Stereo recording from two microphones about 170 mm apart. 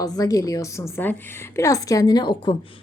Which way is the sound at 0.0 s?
20° left (ahead or behind).